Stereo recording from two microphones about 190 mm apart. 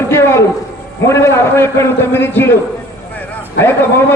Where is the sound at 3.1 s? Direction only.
10° left (ahead or behind).